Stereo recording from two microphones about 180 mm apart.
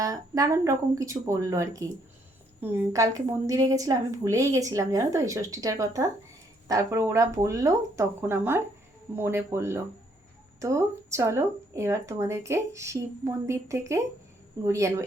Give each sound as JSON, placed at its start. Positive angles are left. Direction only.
{"t": 0.0, "sound": "a woman's voice", "side_deg": -20}